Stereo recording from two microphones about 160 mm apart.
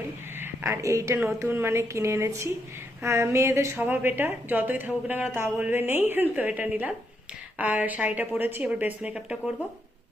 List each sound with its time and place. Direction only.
0.3 s a woman's voice: 15° right (ahead or behind)